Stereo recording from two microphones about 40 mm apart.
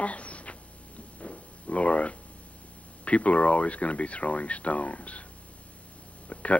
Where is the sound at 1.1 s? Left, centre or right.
Left.